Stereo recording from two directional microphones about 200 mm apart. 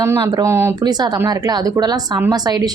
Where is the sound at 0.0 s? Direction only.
15° right (ahead or behind).